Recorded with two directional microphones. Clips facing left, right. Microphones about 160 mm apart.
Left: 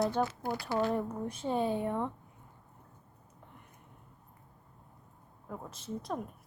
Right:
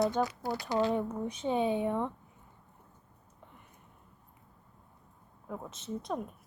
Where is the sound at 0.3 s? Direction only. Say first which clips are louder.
Right 1 dB; 20° right (ahead or behind).